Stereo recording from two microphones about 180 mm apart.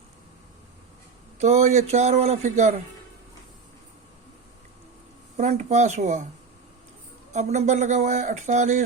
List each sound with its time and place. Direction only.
1.4 s speech: 40° right (ahead or behind)
5.4 s speech: 40° right (ahead or behind)
7.3 s speech: 40° right (ahead or behind)